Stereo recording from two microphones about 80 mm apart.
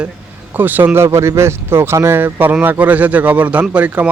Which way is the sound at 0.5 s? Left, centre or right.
Right.